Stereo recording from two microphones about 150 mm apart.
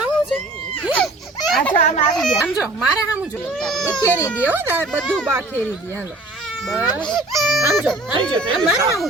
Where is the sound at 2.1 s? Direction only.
Centre (ahead or behind).